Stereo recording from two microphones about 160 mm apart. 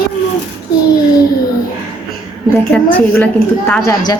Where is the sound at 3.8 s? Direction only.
25° left (ahead or behind).